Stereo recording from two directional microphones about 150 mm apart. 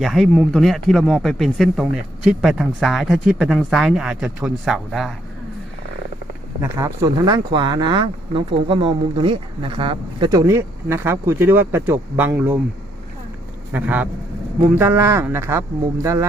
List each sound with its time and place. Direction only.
0.0 s speech: centre (ahead or behind)
6.6 s speech: 20° right (ahead or behind)
13.7 s speech: 10° right (ahead or behind)